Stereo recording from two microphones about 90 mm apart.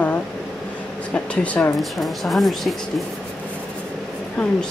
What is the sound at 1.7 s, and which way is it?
Speech, centre (ahead or behind).